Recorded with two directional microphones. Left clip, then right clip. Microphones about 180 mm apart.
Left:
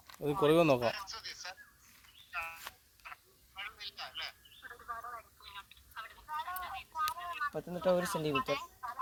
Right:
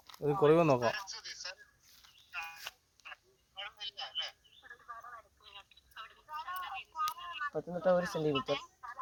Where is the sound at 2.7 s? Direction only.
30° right (ahead or behind).